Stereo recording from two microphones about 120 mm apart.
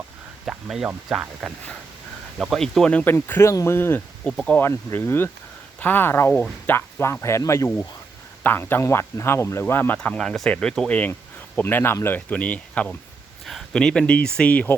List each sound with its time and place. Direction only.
0.4 s speech: 5° right (ahead or behind); by 4.3 s 20° left (ahead or behind)
4.3 s speech: 5° left (ahead or behind)
4.6 s speech: 20° left (ahead or behind)